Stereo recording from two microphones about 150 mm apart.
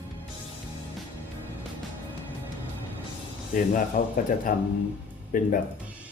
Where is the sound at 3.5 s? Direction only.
65° left (ahead or behind).